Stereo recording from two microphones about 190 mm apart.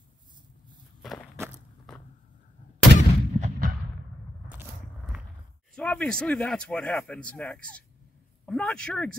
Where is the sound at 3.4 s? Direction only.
40° right (ahead or behind).